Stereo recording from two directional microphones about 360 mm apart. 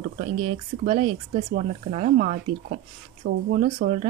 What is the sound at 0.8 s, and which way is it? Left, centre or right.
Speech, centre.